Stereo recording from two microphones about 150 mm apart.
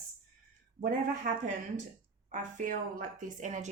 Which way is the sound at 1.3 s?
75° right (ahead or behind).